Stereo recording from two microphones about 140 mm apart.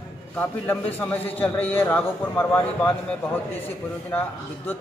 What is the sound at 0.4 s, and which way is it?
A man's voice, 15° left (ahead or behind).